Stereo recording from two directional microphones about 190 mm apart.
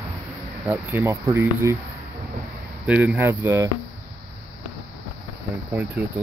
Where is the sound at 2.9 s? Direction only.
10° right (ahead or behind).